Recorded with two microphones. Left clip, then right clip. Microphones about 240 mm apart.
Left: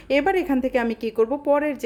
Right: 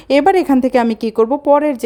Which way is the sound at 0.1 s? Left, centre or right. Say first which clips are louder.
Right 9 dB; right.